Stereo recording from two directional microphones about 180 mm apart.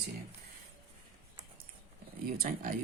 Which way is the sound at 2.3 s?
55° right (ahead or behind).